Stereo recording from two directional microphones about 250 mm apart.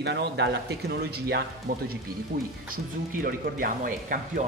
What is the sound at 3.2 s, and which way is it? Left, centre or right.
Speech, right.